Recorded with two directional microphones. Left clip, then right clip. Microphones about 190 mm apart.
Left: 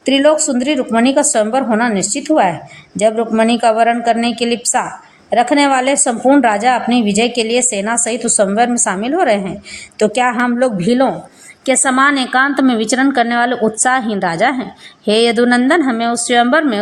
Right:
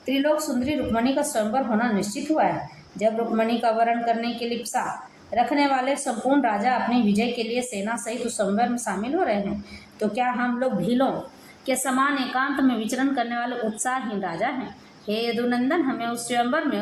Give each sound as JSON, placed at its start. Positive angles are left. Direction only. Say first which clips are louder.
{"t": 0.0, "sound": "a woman's voice", "louder": "left 11 dB", "side_deg": 50}